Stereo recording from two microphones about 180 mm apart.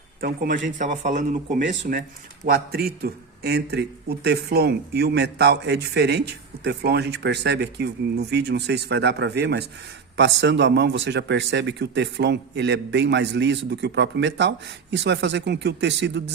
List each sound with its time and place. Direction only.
0.2 s a man's voice: 50° right (ahead or behind); by 16.3 s 75° right (ahead or behind)